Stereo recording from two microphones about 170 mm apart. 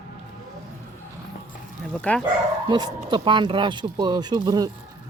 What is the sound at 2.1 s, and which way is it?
Speech, 10° left (ahead or behind).